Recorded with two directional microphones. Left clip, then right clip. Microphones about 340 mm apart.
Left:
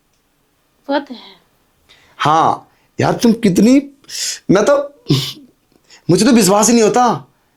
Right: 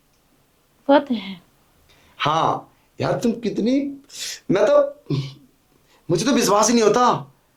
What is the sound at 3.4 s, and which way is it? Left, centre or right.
Speech, left.